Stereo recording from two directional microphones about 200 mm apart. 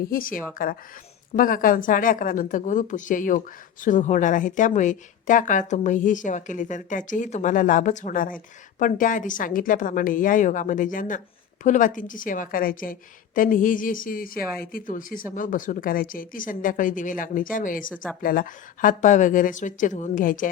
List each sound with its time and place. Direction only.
0.0 s a woman's voice: 45° left (ahead or behind)